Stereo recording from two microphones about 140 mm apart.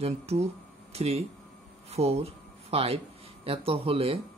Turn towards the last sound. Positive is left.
turn(degrees=-45)  # may be behind; listen again after turning